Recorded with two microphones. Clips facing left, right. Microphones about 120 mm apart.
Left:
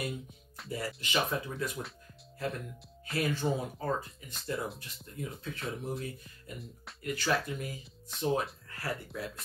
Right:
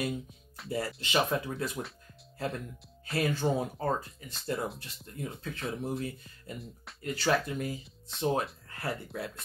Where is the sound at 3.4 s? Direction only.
55° right (ahead or behind).